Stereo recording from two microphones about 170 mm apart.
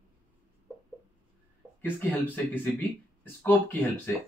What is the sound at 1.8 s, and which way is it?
Speech, 10° left (ahead or behind).